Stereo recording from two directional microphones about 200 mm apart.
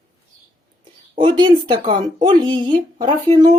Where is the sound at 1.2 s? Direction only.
25° right (ahead or behind).